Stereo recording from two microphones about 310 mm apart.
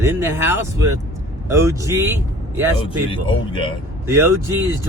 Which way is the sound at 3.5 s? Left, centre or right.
Centre.